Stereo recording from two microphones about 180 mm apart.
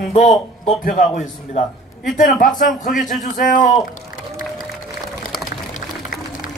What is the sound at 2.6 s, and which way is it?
Speech, centre (ahead or behind).